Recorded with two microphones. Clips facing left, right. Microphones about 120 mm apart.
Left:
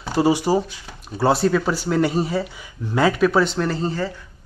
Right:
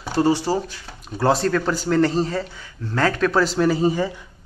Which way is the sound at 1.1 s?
5° left (ahead or behind).